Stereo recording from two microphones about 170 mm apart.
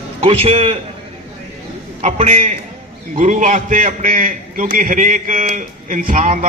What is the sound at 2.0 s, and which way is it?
A man's voice, 45° right (ahead or behind).